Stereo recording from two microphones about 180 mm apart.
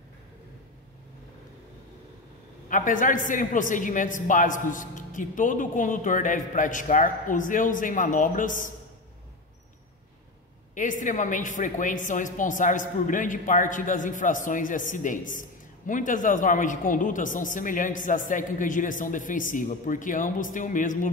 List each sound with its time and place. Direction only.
2.7 s a woman's voice: 45° left (ahead or behind)
10.7 s a woman's voice: 45° left (ahead or behind)